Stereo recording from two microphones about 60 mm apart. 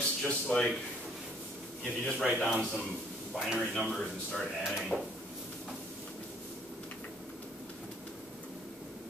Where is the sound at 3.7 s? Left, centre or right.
Centre.